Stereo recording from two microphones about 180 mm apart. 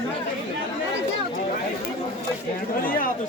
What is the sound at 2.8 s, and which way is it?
Speech, 50° left (ahead or behind).